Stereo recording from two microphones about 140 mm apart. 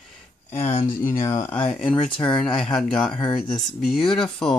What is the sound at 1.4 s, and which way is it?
Speech, 40° left (ahead or behind).